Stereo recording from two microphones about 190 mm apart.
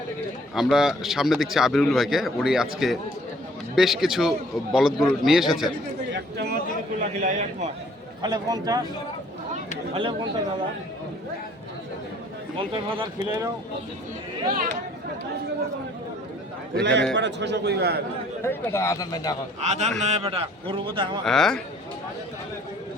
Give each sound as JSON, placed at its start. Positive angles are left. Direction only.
{"t": 0.5, "sound": "a man's voice", "side_deg": 0}
{"t": 6.1, "sound": "a sound", "side_deg": -60}
{"t": 7.2, "sound": "a man's voice", "side_deg": -40}
{"t": 8.2, "sound": "a man's voice", "side_deg": -20}
{"t": 9.9, "sound": "a man's voice", "side_deg": -30}
{"t": 12.5, "sound": "a man's voice", "side_deg": -25}
{"t": 16.8, "sound": "a man's voice", "side_deg": -65}
{"t": 18.4, "sound": "speech", "side_deg": 15}
{"t": 19.6, "sound": "a man's voice", "side_deg": -35}
{"t": 21.2, "sound": "a man's voice", "side_deg": 0}